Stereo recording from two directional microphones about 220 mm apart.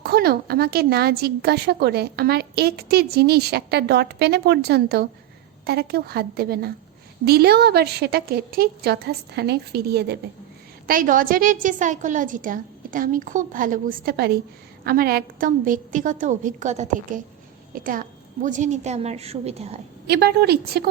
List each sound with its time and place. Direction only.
0.0 s a woman's voice: 45° right (ahead or behind); by 19.8 s 30° right (ahead or behind)
20.1 s a woman's voice: 45° right (ahead or behind)